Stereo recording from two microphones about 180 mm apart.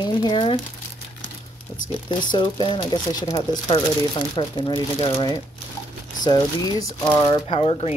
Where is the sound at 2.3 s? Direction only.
25° left (ahead or behind).